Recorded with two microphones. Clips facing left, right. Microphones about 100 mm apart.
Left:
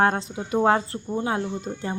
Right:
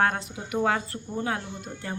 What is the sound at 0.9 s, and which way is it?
Speech, 20° left (ahead or behind).